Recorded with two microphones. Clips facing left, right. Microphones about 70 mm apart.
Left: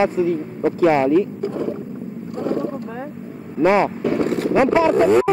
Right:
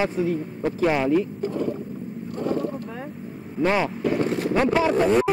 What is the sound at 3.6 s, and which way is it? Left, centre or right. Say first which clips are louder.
Speech: left 6 dB; left.